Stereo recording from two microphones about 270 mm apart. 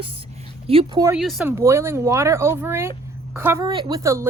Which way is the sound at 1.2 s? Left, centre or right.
Centre.